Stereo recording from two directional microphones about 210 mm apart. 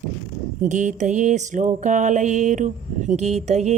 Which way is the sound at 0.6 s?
35° right (ahead or behind).